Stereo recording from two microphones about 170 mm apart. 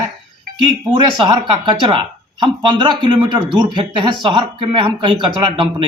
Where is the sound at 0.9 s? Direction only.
30° right (ahead or behind).